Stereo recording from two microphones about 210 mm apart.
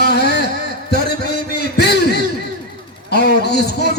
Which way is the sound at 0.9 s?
50° left (ahead or behind).